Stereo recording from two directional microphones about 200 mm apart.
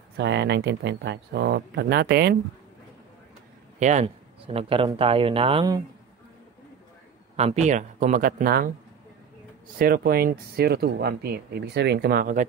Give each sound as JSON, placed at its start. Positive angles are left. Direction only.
{"t": 0.2, "sound": "speech", "side_deg": -60}
{"t": 3.8, "sound": "speech", "side_deg": -35}
{"t": 7.3, "sound": "speech", "side_deg": -35}
{"t": 9.8, "sound": "speech", "side_deg": -45}